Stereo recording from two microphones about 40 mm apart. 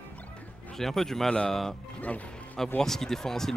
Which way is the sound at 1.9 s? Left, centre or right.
Left.